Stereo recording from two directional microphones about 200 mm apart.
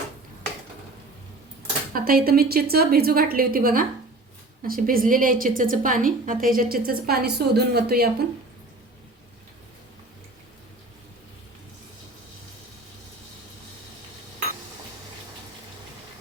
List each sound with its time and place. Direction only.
1.9 s a woman's voice: 45° right (ahead or behind)